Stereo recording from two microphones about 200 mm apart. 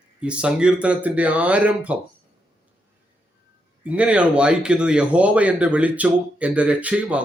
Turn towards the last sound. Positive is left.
turn(degrees=-5)  # may be behind; listen again after turning